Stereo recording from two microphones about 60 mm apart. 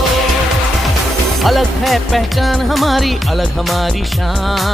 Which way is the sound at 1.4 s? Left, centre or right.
Centre.